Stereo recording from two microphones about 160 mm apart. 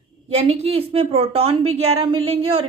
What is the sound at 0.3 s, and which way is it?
Speech, 40° right (ahead or behind).